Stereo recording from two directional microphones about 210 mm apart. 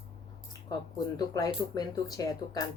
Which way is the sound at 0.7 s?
20° left (ahead or behind).